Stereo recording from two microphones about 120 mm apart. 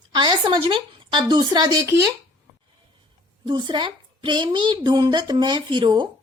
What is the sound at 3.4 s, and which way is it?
Speech, 40° right (ahead or behind).